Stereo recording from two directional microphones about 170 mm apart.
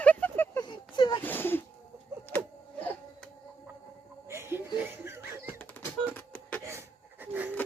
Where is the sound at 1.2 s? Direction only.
10° left (ahead or behind).